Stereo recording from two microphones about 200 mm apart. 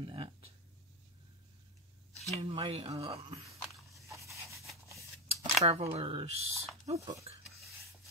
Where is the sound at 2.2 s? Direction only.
30° right (ahead or behind).